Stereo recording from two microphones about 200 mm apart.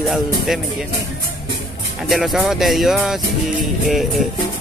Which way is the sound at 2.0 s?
Centre (ahead or behind).